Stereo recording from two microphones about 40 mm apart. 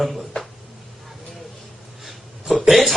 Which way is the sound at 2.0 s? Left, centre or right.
Centre.